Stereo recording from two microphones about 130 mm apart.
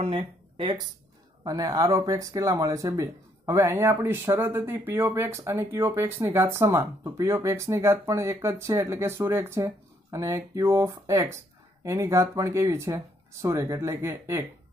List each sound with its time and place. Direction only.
0.0 s speech: 45° right (ahead or behind)
1.4 s speech: 25° right (ahead or behind)